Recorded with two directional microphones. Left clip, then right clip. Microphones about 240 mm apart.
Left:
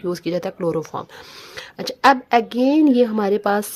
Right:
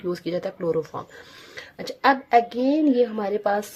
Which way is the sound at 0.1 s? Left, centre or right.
Left.